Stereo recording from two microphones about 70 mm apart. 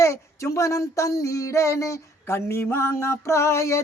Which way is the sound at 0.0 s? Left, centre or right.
Left.